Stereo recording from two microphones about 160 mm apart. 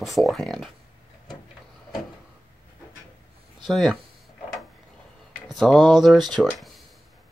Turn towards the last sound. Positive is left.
turn(degrees=0)  # may be behind; listen again after turning